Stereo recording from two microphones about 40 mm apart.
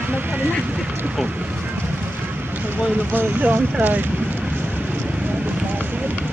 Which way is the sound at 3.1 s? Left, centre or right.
Right.